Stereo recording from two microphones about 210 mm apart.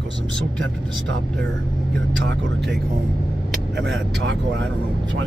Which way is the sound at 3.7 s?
60° right (ahead or behind).